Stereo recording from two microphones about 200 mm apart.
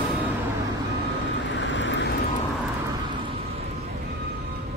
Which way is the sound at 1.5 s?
65° left (ahead or behind).